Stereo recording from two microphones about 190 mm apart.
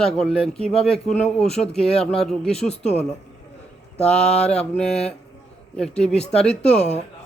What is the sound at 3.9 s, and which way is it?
Mantra, 5° left (ahead or behind).